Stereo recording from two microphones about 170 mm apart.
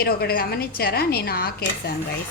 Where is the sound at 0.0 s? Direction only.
65° left (ahead or behind).